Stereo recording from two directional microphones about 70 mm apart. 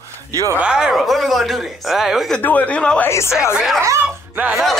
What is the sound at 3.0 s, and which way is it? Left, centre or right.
Speech, left.